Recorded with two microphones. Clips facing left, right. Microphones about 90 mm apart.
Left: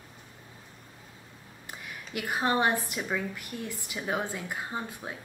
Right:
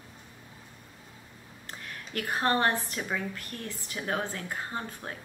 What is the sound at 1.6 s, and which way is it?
A woman's voice, 10° left (ahead or behind).